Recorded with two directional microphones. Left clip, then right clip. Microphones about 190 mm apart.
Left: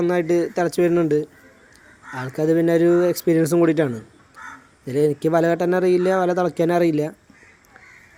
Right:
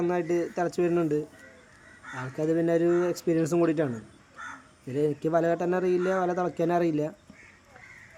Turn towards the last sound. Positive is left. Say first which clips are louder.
# left 7 dB
turn(degrees=15)  # may be behind; listen again after turning